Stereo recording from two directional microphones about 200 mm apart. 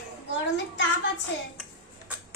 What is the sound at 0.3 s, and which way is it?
Child singing, 65° left (ahead or behind).